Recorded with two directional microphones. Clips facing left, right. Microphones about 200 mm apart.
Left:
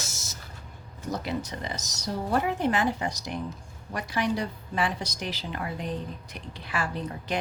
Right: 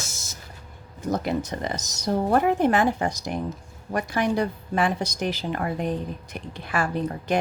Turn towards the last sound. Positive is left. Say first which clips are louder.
# right 6 dB
turn(degrees=-50)  # may be behind; listen again after turning